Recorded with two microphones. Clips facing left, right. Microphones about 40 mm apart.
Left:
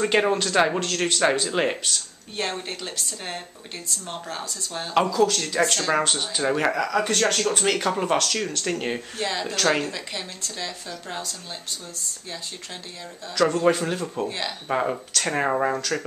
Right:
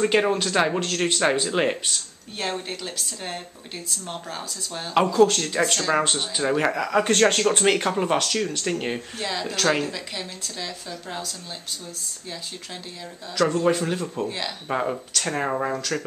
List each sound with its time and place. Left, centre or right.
0.0 s speech: centre
0.7 s speech: centre
1.5 s speech: centre
5.1 s speech: right
5.6 s speech: centre
7.1 s speech: right
7.9 s speech: centre
13.3 s speech: centre